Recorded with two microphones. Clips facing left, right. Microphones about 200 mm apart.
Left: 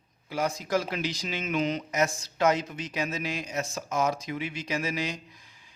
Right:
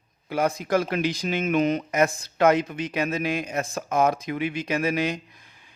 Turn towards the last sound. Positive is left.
turn(degrees=-60)  # may be behind; listen again after turning